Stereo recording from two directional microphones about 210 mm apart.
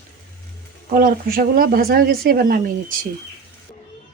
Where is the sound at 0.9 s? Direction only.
40° right (ahead or behind).